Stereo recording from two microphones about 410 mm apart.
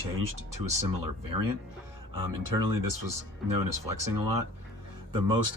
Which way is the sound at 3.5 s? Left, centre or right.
Right.